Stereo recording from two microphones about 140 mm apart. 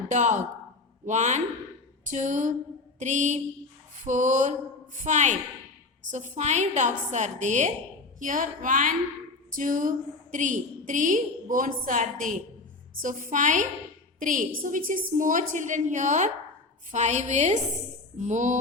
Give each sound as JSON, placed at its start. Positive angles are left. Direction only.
{"t": 0.1, "sound": "a woman's voice", "side_deg": -60}
{"t": 8.2, "sound": "a woman's voice", "side_deg": -70}